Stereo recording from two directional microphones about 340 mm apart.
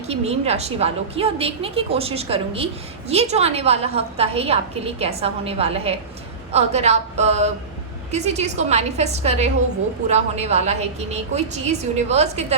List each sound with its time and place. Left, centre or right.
0.1 s a woman's voice: centre